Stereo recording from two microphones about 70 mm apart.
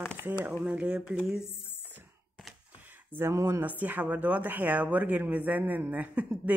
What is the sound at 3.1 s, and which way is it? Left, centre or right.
Speech, right.